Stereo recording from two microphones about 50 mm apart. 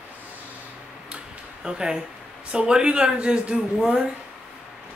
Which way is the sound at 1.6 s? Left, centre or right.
Centre.